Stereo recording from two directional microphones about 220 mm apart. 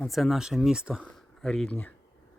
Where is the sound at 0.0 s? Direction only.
Centre (ahead or behind).